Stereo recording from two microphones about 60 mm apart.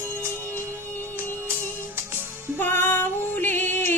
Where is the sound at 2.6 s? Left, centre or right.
Left.